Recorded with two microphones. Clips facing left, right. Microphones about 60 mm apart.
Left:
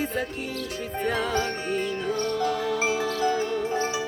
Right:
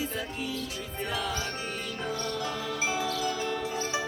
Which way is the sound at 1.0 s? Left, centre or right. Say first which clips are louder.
Left 7 dB; left.